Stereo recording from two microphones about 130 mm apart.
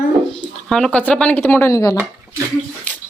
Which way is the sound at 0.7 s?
5° left (ahead or behind).